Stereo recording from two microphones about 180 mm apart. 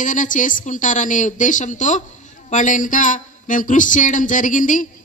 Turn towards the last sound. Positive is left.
turn(degrees=45)  # may be behind; listen again after turning